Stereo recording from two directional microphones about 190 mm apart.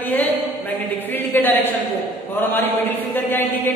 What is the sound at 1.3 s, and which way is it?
Speech, 10° left (ahead or behind).